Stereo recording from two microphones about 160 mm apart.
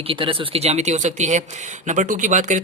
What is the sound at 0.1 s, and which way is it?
Speech, 35° right (ahead or behind).